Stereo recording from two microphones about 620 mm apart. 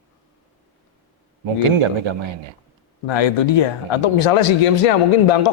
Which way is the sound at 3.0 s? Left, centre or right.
Left.